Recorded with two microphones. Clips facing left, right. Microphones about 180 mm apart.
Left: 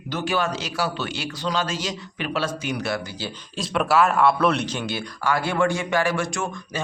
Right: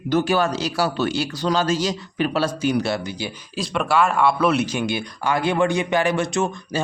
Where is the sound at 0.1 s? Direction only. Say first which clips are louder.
Right 5 dB; 40° right (ahead or behind).